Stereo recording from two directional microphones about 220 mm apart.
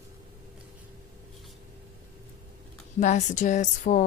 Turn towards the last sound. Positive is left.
turn(degrees=35)  # may be behind; listen again after turning